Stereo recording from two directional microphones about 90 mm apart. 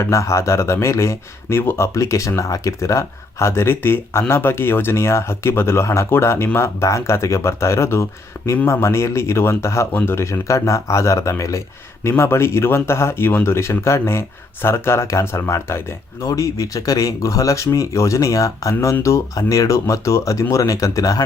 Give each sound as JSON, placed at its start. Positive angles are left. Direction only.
{"t": 0.0, "sound": "speech", "side_deg": 35}